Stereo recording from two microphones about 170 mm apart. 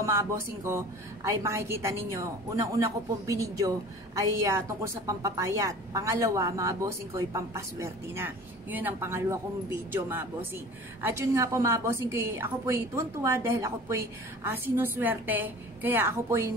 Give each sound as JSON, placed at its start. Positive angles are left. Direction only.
{"t": 0.0, "sound": "a woman's voice", "side_deg": -15}